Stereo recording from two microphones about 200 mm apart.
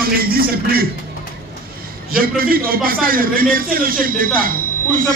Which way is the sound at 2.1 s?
45° right (ahead or behind).